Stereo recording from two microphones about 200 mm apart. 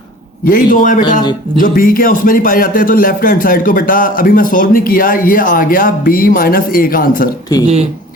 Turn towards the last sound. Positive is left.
turn(degrees=20)  # may be behind; listen again after turning